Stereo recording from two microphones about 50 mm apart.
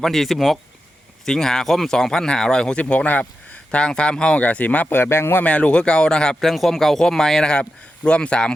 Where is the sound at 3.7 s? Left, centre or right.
Centre.